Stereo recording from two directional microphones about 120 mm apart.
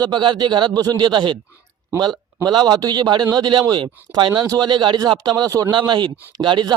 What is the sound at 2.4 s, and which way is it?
Speech, 35° right (ahead or behind).